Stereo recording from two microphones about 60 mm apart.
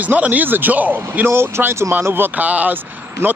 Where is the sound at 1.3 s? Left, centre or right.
Right.